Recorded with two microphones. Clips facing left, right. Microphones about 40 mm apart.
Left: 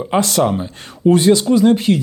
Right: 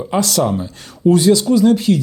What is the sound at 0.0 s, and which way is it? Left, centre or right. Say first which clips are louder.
Speech: left 1 dB; left.